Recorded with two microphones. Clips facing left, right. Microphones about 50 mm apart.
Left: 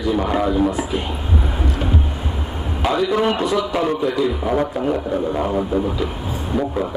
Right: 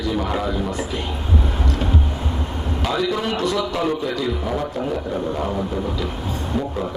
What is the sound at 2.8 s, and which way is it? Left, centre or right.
Speech, centre.